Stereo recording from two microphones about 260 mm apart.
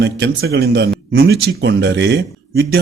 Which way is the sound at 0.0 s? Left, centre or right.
Right.